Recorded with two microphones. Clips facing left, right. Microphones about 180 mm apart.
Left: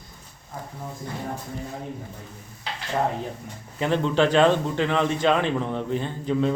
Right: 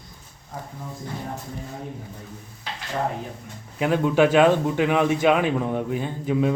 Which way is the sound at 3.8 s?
10° right (ahead or behind).